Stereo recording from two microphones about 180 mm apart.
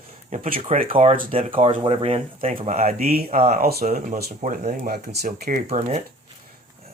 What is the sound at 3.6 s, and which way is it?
Speech, 60° right (ahead or behind).